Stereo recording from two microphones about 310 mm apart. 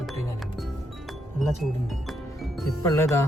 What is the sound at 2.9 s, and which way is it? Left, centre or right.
Speech, centre.